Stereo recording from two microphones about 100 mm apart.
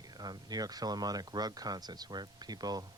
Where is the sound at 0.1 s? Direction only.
45° right (ahead or behind).